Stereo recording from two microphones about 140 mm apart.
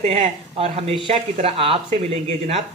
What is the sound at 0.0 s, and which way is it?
Speech, 45° right (ahead or behind).